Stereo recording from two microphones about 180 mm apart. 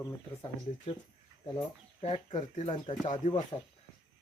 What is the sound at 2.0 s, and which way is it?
Speech, 40° left (ahead or behind).